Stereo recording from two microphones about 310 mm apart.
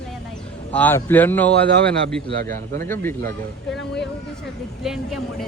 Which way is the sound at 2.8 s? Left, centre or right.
Centre.